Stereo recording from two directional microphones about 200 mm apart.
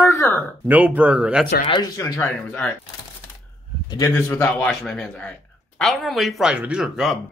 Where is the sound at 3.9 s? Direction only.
15° left (ahead or behind).